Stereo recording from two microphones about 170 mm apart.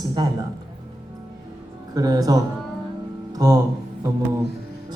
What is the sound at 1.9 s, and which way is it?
Speech, 20° right (ahead or behind).